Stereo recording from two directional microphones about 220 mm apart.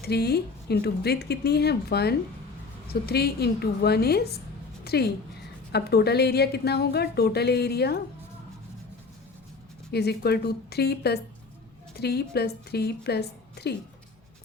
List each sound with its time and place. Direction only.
0.0 s a woman's voice: 45° left (ahead or behind)
4.8 s a sound: 45° left (ahead or behind)
5.7 s a woman's voice: 45° left (ahead or behind)
9.9 s a woman's voice: 45° left (ahead or behind)